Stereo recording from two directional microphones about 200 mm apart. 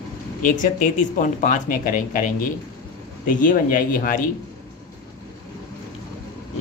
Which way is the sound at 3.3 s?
40° left (ahead or behind).